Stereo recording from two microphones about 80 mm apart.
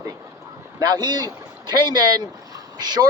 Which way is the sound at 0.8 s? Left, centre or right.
Right.